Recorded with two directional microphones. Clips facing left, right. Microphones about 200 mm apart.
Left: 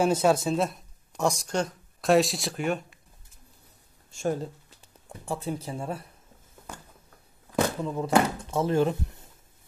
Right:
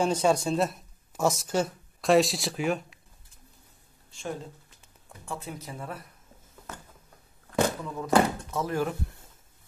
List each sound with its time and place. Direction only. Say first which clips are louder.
0.0 s speech: left 2 dB; 5° left (ahead or behind)
4.1 s a woman's voice: left 7 dB; 40° left (ahead or behind)
7.8 s speech: left 1 dB; 30° left (ahead or behind)